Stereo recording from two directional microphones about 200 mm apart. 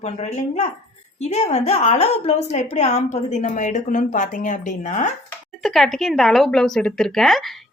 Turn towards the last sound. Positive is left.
turn(degrees=0)  # may be behind; listen again after turning